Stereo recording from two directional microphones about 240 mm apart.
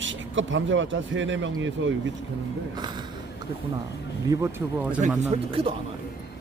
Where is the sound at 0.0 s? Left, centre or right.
Right.